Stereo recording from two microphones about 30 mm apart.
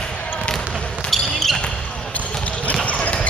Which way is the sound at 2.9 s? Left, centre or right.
Left.